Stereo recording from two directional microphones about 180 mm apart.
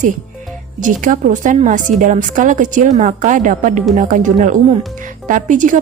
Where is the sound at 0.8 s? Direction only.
45° right (ahead or behind).